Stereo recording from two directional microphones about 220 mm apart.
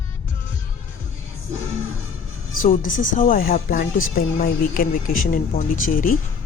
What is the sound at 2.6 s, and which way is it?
Speech, 35° left (ahead or behind).